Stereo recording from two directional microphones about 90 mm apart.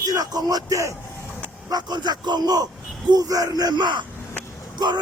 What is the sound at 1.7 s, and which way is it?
Speech, 50° right (ahead or behind).